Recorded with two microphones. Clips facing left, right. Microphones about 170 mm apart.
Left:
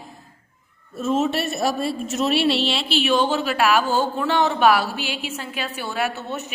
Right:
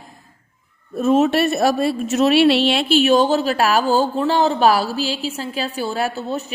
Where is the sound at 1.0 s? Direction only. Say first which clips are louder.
Right 6 dB; 60° right (ahead or behind).